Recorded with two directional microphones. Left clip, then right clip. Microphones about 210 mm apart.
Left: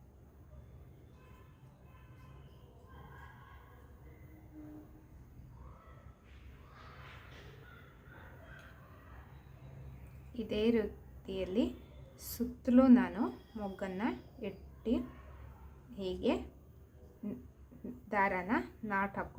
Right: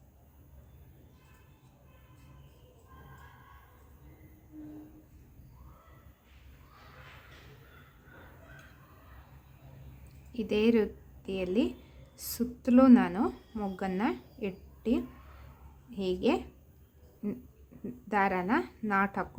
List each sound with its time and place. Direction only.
10.3 s a woman's voice: 30° right (ahead or behind)